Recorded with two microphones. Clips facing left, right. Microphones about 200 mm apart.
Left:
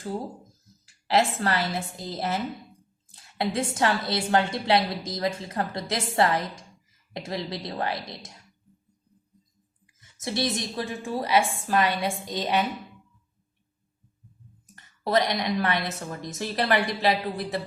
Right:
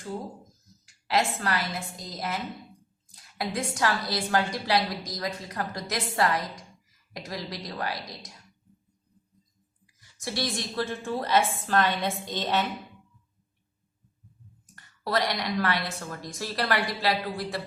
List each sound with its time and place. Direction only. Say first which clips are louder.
1.0 s a woman's voice: left 3 dB; 30° left (ahead or behind)
9.8 s a woman's voice: left 2 dB; 25° left (ahead or behind)
14.8 s a woman's voice: left 4 dB; 20° left (ahead or behind)